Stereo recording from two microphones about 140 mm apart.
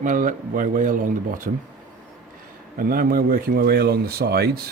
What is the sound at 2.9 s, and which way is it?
A man's voice, 90° right.